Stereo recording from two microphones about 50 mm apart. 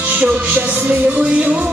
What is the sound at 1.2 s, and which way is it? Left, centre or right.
Music, right.